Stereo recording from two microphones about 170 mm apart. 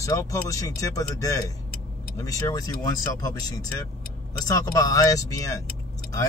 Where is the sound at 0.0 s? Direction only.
20° left (ahead or behind).